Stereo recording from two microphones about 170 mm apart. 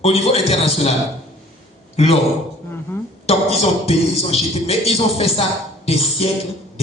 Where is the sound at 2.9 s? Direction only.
15° left (ahead or behind).